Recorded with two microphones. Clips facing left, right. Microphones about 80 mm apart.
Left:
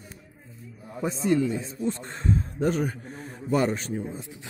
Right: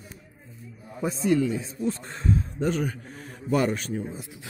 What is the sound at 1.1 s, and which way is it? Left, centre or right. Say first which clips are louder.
Speech: right 1 dB; left.